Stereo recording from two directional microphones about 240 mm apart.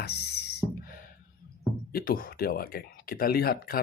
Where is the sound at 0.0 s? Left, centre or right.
Left.